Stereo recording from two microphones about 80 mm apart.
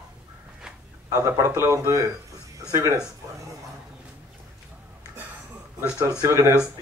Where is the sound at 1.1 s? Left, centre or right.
Right.